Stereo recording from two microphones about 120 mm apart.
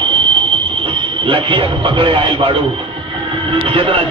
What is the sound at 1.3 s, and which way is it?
Speech, 45° right (ahead or behind).